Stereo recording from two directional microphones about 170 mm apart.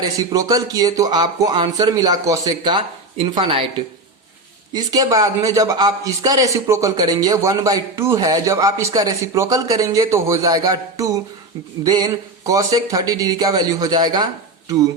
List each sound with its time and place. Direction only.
0.0 s speech: 20° right (ahead or behind)
4.7 s speech: 20° right (ahead or behind)